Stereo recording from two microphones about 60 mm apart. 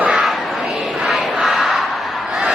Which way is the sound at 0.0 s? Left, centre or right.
Centre.